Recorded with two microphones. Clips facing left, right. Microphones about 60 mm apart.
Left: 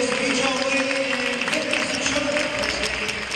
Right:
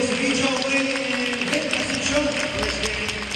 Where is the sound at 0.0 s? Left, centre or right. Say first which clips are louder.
Even; centre.